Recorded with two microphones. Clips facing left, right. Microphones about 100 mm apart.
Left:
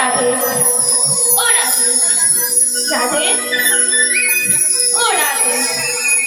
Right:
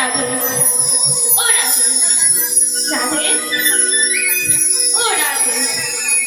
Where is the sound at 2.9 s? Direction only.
55° left (ahead or behind).